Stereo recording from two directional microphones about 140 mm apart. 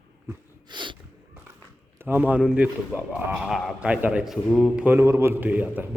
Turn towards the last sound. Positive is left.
turn(degrees=-10)  # may be behind; listen again after turning